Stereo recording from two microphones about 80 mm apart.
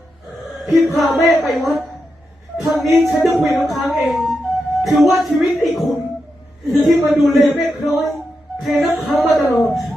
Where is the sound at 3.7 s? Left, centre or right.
Centre.